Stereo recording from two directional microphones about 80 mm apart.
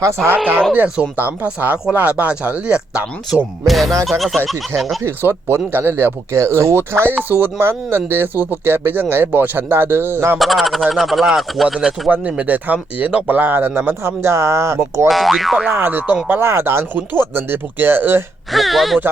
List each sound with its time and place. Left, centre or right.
0.3 s speech: right
3.7 s speech: centre
5.0 s speech: right
10.3 s speech: centre
12.0 s speech: centre; by 15.0 s right
15.0 s speech: centre
15.7 s speech: right
18.5 s speech: centre